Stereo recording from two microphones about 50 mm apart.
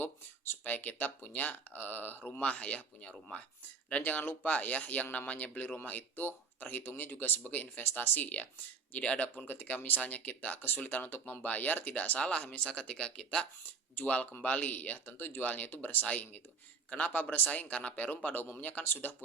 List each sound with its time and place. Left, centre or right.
0.6 s speech: left
2.4 s speech: left
13.7 s a sound: left
14.4 s speech: left